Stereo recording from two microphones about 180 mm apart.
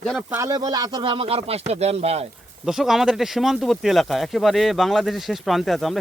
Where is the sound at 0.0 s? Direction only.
Centre (ahead or behind).